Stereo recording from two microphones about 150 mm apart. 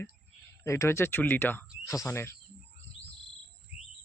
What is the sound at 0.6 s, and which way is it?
Speech, 20° left (ahead or behind).